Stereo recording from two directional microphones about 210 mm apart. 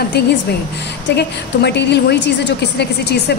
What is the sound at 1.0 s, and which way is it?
A woman's voice, 55° left (ahead or behind).